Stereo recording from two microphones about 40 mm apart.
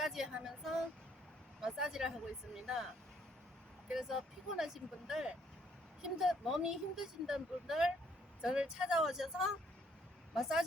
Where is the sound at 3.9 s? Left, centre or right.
Centre.